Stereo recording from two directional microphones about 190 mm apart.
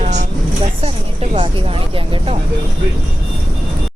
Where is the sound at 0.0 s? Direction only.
35° right (ahead or behind).